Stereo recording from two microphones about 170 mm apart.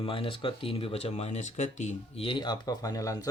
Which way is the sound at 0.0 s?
30° left (ahead or behind).